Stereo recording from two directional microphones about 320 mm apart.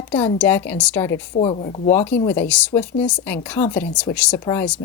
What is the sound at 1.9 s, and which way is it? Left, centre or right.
Speech, centre.